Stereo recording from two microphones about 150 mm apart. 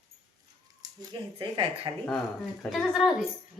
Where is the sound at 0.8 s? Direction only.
30° right (ahead or behind).